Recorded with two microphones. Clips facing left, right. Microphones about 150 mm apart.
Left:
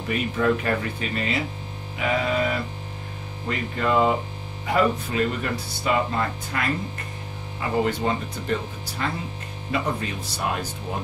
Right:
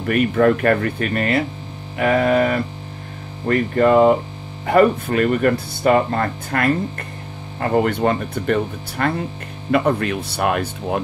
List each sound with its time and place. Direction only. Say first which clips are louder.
0.0 s speech: right 8 dB; 60° right (ahead or behind)
3.4 s mains hum: right 10 dB; 50° right (ahead or behind)
4.6 s speech: right 8 dB; 55° right (ahead or behind)